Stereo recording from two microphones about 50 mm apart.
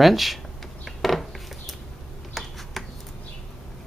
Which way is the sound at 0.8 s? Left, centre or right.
Centre.